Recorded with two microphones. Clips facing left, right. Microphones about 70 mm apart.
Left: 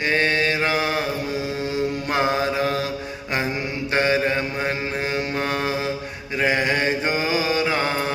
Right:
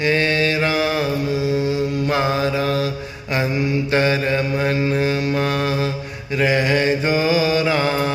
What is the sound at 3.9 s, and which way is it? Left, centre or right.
Mantra, left.